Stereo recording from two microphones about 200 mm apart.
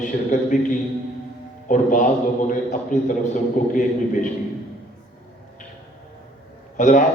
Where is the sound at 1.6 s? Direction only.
40° left (ahead or behind).